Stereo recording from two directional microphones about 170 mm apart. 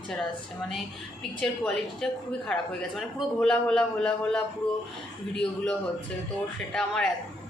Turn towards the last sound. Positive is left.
turn(degrees=5)  # may be behind; listen again after turning